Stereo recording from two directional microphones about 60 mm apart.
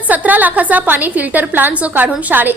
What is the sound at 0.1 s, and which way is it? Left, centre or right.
A woman's voice, right.